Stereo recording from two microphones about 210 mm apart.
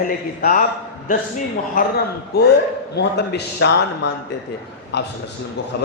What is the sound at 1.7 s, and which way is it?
A man's voice, 50° left (ahead or behind).